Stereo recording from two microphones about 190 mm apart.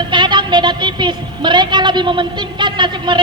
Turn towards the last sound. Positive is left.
turn(degrees=-25)  # may be behind; listen again after turning